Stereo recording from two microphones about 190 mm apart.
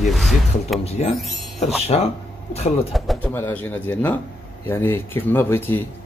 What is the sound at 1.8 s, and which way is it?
Speech, 35° left (ahead or behind).